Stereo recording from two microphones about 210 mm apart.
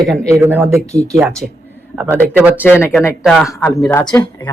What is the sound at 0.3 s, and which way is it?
Speech, 10° right (ahead or behind).